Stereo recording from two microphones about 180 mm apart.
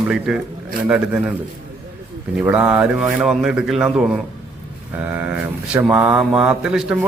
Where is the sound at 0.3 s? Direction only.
Centre (ahead or behind).